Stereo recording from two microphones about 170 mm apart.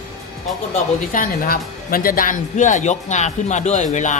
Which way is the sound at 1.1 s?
55° left (ahead or behind).